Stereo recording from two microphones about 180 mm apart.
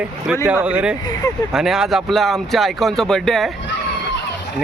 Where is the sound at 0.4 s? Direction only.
5° right (ahead or behind).